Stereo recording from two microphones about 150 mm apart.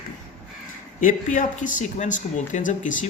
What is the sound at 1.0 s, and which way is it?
Speech, 60° left (ahead or behind).